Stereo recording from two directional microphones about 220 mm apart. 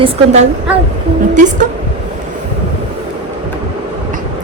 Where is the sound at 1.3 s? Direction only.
35° right (ahead or behind).